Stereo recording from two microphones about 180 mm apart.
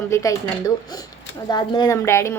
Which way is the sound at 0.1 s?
20° left (ahead or behind).